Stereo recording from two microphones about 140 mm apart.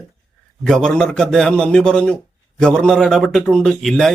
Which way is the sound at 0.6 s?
5° left (ahead or behind).